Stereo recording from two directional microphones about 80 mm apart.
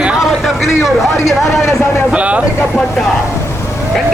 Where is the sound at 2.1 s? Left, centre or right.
Centre.